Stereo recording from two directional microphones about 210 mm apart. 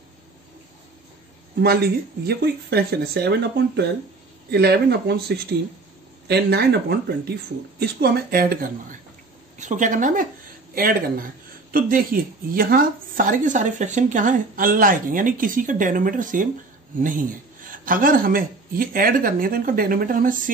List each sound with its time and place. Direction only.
1.6 s speech: 50° right (ahead or behind)